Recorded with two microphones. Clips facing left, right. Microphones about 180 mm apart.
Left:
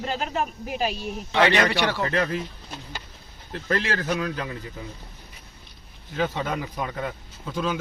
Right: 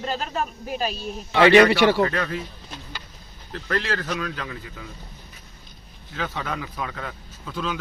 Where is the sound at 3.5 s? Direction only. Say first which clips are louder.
Even; 20° left (ahead or behind).